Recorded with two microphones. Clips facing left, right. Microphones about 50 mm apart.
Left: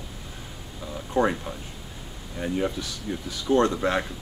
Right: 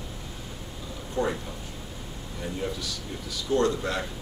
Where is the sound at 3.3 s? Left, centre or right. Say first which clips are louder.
Left 3 dB; left.